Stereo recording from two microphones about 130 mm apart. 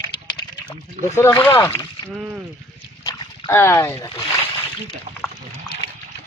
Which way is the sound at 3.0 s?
20° left (ahead or behind).